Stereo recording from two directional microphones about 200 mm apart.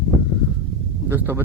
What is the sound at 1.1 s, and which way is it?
Speech, 10° right (ahead or behind).